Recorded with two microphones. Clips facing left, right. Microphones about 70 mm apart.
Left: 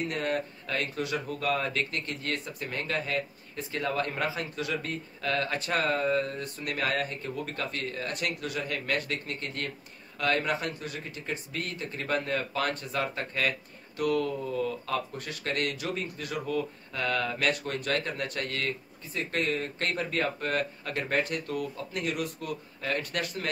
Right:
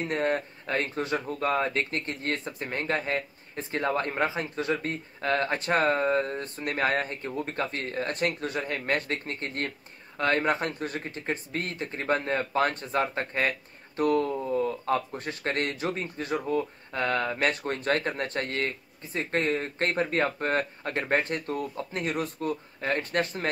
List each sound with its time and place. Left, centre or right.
0.0 s speech: right